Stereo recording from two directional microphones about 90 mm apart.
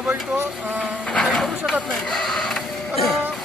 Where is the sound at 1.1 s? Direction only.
5° left (ahead or behind).